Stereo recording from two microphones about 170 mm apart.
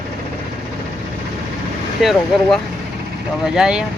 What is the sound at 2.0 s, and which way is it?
Speech, centre (ahead or behind).